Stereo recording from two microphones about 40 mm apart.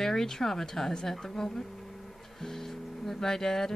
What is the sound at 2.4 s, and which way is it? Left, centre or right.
Music, centre.